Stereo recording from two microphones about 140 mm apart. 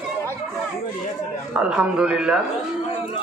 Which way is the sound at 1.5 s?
5° right (ahead or behind).